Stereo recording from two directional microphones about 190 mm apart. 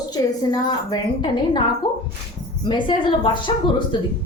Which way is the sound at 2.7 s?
25° left (ahead or behind).